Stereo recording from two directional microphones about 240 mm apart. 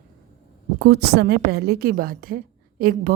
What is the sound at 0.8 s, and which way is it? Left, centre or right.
A woman's voice, right.